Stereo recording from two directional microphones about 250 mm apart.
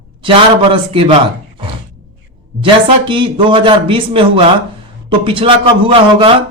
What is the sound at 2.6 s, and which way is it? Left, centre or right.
A man's voice, centre.